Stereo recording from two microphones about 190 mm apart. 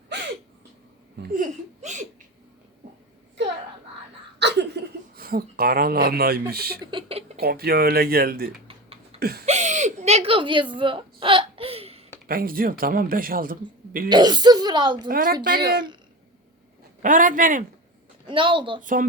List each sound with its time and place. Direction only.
1.1 s speech: 60° right (ahead or behind)
1.4 s speech: 40° right (ahead or behind)
4.4 s chuckle: 65° right (ahead or behind)
6.5 s a man's voice: 55° right (ahead or behind)
6.9 s a sound: 30° right (ahead or behind)
7.4 s a man's voice: 55° right (ahead or behind)
9.2 s a sound: 55° right (ahead or behind)
9.5 s whimper: 40° right (ahead or behind)
12.3 s a man's voice: 50° right (ahead or behind)
14.1 s speech: 25° right (ahead or behind)
15.0 s a man's voice: 50° right (ahead or behind)
17.0 s a man's voice: 45° right (ahead or behind)
18.3 s speech: 25° right (ahead or behind)
18.8 s a man's voice: 45° right (ahead or behind)